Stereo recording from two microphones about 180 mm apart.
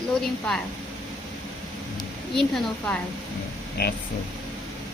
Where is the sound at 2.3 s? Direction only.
5° left (ahead or behind).